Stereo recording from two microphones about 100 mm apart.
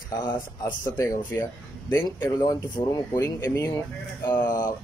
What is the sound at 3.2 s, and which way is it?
Speech, 25° left (ahead or behind).